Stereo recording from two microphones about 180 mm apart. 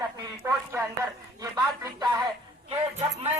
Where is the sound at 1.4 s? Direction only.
20° right (ahead or behind).